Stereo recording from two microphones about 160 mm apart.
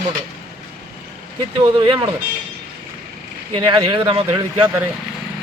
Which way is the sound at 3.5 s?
30° right (ahead or behind).